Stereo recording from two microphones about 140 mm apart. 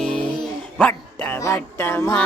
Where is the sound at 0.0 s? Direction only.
5° left (ahead or behind).